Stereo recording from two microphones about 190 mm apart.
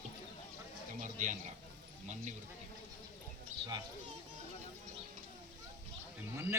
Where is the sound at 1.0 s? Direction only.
40° right (ahead or behind).